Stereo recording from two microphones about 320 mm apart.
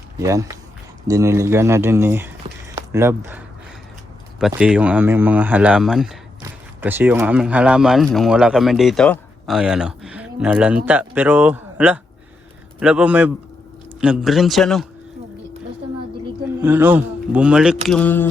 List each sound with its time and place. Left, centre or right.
0.2 s speech: centre
16.6 s speech: centre